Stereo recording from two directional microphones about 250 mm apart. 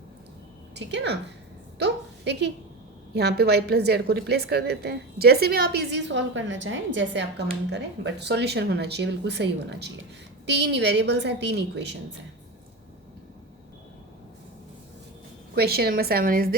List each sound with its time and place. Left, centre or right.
0.7 s a woman's voice: right
1.8 s a sound: right
3.2 s a woman's voice: right
15.5 s a woman's voice: right